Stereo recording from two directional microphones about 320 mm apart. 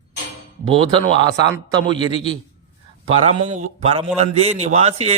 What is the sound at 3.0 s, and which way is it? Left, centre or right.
A man's voice, centre.